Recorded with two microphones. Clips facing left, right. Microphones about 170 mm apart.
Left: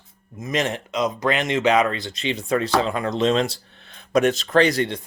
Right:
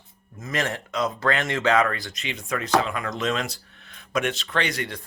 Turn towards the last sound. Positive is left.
turn(degrees=35)  # may be behind; listen again after turning